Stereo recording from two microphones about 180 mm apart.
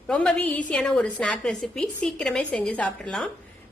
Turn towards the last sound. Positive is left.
turn(degrees=0)  # may be behind; listen again after turning